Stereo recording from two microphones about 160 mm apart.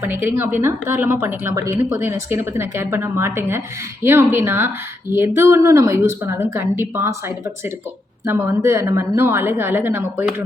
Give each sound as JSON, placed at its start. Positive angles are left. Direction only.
{"t": 0.0, "sound": "a woman's voice", "side_deg": -15}
{"t": 8.3, "sound": "a woman's voice", "side_deg": -15}